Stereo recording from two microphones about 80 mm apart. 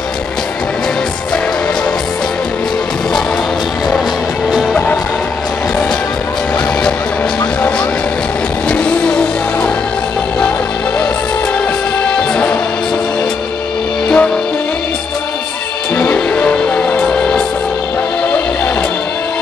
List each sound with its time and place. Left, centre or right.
8.6 s vehicle: centre
12.2 s music: centre
14.0 s music: centre
16.0 s music: centre